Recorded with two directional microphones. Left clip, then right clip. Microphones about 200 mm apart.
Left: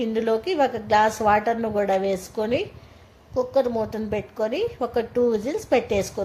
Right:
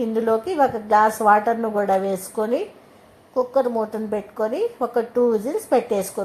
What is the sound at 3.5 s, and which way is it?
Speech, 10° left (ahead or behind).